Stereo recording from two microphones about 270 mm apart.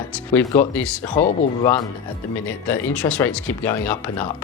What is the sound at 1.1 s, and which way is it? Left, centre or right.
Speech, left.